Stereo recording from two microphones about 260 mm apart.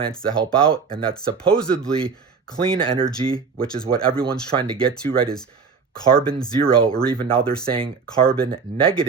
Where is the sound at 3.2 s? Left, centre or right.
Right.